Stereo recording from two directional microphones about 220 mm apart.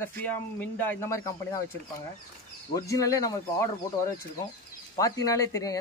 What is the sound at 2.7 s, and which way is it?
Speech, 15° left (ahead or behind).